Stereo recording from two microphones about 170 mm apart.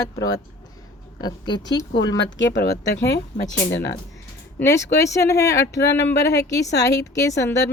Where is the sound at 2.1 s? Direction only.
90° left.